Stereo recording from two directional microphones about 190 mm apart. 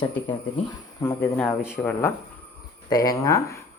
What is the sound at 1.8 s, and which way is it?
Speech, 10° left (ahead or behind).